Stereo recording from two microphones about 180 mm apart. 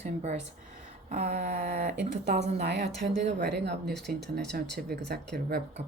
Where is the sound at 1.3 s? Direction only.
55° right (ahead or behind).